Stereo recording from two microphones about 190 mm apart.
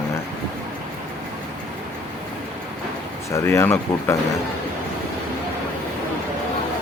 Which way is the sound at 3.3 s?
15° left (ahead or behind).